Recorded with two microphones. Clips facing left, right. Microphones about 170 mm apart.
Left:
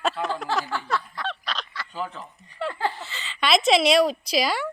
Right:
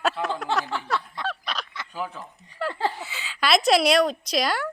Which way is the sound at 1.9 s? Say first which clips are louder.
Even; 10° right (ahead or behind).